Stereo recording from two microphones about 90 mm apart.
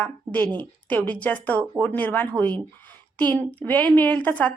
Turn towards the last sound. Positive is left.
turn(degrees=15)  # may be behind; listen again after turning